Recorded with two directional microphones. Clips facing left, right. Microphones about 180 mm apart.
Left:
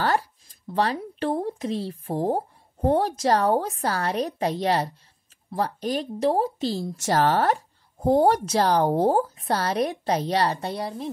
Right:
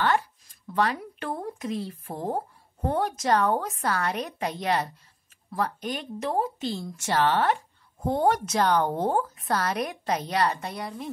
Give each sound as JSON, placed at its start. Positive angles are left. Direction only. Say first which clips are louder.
{"t": 0.0, "sound": "speech", "louder": "left 1 dB", "side_deg": 35}